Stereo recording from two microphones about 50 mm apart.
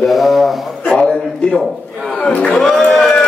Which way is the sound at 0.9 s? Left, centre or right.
Centre.